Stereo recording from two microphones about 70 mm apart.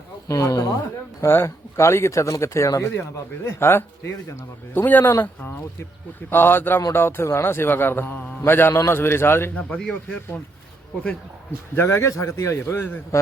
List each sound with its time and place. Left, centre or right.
0.3 s speech: left
1.2 s speech: left
2.9 s a man's voice: left
9.6 s a man's voice: centre
11.7 s a man's voice: left